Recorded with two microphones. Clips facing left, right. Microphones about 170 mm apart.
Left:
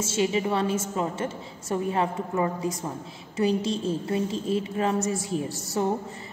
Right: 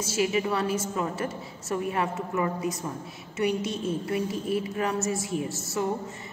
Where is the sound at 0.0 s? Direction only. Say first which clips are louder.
Left 1 dB; 25° left (ahead or behind).